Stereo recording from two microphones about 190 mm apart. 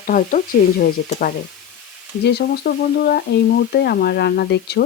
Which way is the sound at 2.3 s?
55° left (ahead or behind).